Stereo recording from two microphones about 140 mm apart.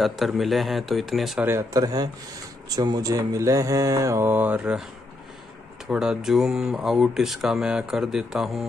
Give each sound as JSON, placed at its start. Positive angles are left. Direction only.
{"t": 0.0, "sound": "speech", "side_deg": 0}
{"t": 1.4, "sound": "mantra", "side_deg": -20}
{"t": 5.9, "sound": "speech", "side_deg": -5}